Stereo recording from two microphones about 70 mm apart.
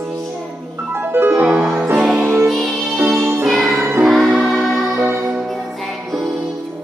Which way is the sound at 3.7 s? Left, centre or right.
Right.